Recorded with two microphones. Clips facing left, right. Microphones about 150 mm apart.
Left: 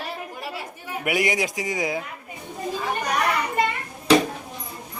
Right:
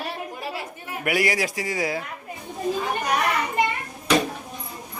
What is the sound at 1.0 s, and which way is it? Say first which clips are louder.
Speech: even; 20° left (ahead or behind).